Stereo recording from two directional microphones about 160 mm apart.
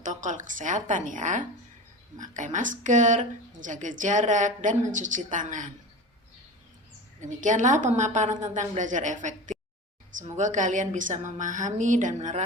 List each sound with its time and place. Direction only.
0.0 s a woman's voice: 50° right (ahead or behind)
7.2 s a woman's voice: 50° right (ahead or behind)